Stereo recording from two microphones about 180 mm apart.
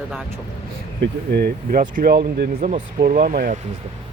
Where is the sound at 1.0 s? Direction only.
60° right (ahead or behind).